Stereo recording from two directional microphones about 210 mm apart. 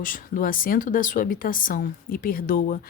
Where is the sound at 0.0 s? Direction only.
40° left (ahead or behind).